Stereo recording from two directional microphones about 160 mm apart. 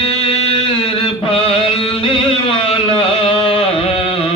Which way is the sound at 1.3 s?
35° left (ahead or behind).